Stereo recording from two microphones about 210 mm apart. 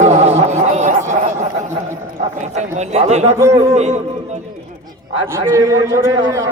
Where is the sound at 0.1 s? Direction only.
30° right (ahead or behind).